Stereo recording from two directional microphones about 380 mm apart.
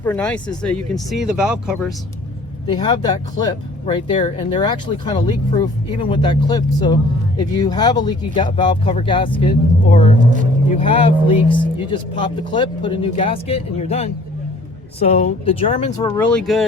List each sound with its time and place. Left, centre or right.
0.0 s speech: centre
2.6 s speech: centre